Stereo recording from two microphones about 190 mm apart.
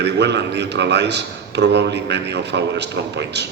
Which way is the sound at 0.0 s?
65° right (ahead or behind).